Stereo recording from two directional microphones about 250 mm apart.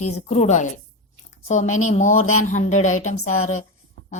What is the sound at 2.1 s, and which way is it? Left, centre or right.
Speech, left.